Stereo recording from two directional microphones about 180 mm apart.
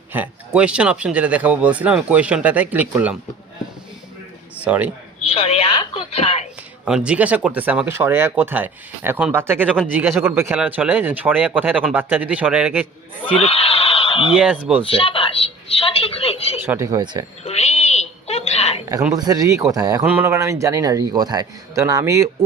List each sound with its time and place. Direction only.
0.1 s speech: 10° right (ahead or behind)
4.6 s speech: 10° right (ahead or behind)
5.3 s a woman's voice: 30° left (ahead or behind)
6.8 s speech: 5° right (ahead or behind)
13.4 s a sound: 35° left (ahead or behind)
14.3 s speech: 5° right (ahead or behind)
14.8 s a woman's voice: 30° left (ahead or behind)
16.6 s speech: 10° right (ahead or behind)
17.4 s a sound: 35° left (ahead or behind)
19.1 s speech: 20° right (ahead or behind)